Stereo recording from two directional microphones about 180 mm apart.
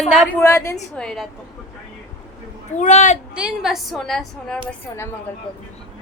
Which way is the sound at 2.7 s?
40° left (ahead or behind).